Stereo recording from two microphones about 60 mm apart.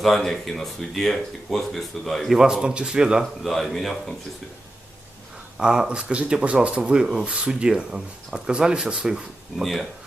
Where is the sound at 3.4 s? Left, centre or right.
Centre.